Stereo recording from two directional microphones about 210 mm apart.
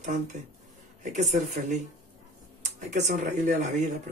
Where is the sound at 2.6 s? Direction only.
35° right (ahead or behind).